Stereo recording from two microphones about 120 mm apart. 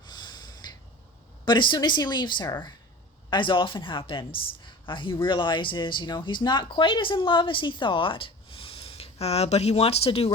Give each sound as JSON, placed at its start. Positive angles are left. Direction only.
{"t": 0.0, "sound": "snort", "side_deg": 40}
{"t": 1.5, "sound": "speech", "side_deg": 40}